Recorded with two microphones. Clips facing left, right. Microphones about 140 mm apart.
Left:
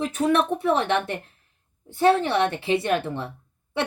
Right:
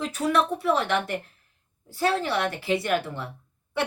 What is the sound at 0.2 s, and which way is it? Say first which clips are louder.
A woman's voice: left 2 dB; 25° left (ahead or behind).